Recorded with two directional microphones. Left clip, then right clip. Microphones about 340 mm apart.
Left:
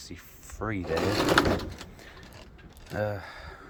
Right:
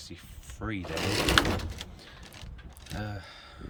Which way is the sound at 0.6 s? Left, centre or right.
Centre.